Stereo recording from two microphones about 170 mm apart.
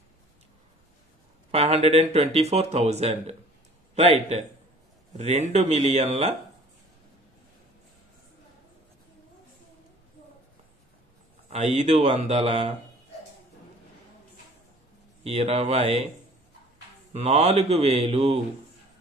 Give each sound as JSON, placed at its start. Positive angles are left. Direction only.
{"t": 1.5, "sound": "speech", "side_deg": -40}
{"t": 11.5, "sound": "speech", "side_deg": -40}
{"t": 15.2, "sound": "speech", "side_deg": -40}
{"t": 17.1, "sound": "speech", "side_deg": -40}